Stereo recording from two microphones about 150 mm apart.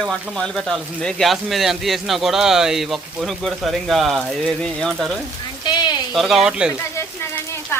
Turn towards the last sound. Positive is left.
turn(degrees=15)  # may be behind; listen again after turning